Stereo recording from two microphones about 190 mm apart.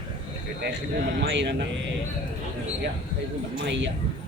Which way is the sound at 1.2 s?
65° right (ahead or behind).